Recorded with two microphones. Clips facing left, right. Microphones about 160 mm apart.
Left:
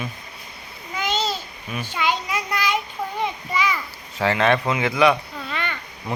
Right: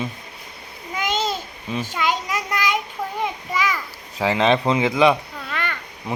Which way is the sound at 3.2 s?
5° right (ahead or behind).